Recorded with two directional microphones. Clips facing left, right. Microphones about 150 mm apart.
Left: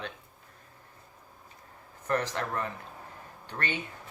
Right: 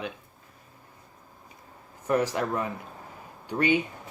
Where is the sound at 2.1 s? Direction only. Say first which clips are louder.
Right 5 dB; 10° right (ahead or behind).